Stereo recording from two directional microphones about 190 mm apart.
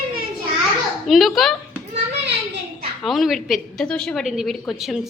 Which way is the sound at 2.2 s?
65° right (ahead or behind).